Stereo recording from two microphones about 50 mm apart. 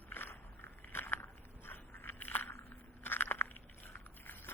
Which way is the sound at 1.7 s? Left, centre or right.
Left.